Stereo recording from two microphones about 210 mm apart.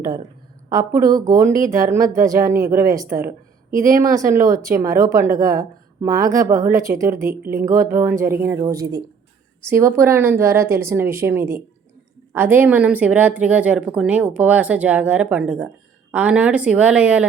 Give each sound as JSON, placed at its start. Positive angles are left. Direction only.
{"t": 0.7, "sound": "speech", "side_deg": -15}